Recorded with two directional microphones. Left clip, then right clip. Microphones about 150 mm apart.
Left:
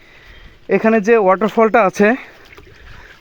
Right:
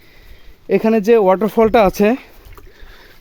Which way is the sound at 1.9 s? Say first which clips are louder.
Left 1 dB; centre (ahead or behind).